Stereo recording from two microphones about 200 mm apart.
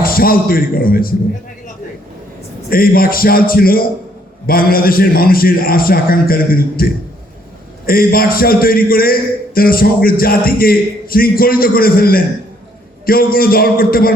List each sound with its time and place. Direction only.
0.0 s a man's voice: 45° left (ahead or behind)
2.6 s a man's voice: 45° left (ahead or behind)